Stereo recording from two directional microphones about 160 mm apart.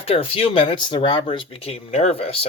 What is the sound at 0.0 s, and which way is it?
Speech, 40° left (ahead or behind).